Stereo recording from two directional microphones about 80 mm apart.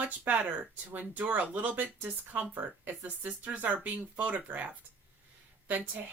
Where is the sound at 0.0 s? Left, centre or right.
Centre.